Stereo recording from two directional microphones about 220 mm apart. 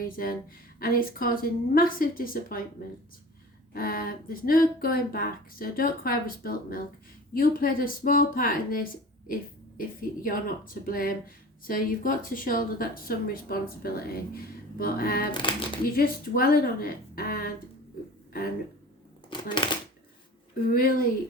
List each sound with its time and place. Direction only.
0.0 s speech: 40° left (ahead or behind)
3.7 s speech: 40° left (ahead or behind)
15.3 s speech: 20° left (ahead or behind)
15.9 s speech: 40° left (ahead or behind)
19.3 s speech: 20° left (ahead or behind)